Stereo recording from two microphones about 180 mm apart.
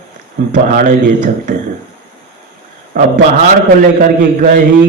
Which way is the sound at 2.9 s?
50° right (ahead or behind).